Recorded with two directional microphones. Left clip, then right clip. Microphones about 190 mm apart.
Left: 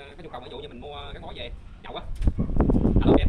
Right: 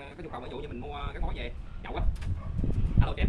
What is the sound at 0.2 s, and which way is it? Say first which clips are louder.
Speech: left 1 dB; 5° right (ahead or behind).